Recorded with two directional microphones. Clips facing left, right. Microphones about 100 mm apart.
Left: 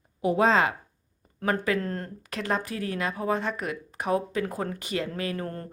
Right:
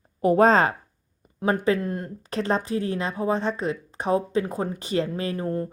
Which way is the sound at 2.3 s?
30° right (ahead or behind).